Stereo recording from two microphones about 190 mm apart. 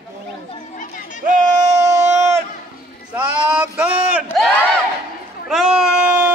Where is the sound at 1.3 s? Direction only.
40° right (ahead or behind).